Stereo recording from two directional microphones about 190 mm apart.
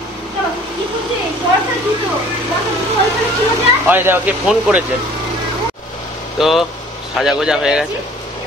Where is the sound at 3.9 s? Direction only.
10° right (ahead or behind).